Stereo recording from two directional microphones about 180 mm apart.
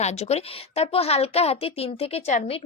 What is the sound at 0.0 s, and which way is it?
Speech, 35° left (ahead or behind).